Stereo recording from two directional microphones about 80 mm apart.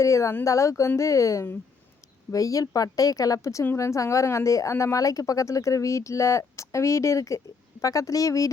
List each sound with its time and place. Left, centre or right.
0.0 s a woman's voice: left